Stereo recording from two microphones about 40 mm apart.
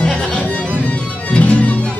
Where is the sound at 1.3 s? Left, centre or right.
Left.